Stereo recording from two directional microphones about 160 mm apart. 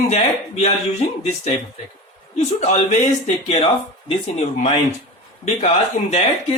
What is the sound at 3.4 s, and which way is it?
Speech, 35° left (ahead or behind).